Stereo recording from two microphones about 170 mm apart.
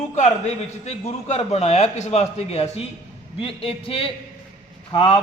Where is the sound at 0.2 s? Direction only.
40° left (ahead or behind).